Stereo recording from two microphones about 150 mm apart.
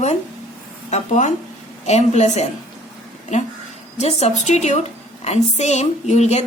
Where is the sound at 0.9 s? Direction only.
50° left (ahead or behind).